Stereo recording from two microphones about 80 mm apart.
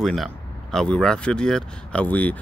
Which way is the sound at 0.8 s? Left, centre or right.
Centre.